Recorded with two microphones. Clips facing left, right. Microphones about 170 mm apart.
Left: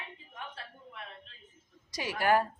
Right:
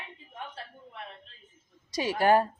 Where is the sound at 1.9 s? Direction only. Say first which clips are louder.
Right 4 dB; 25° right (ahead or behind).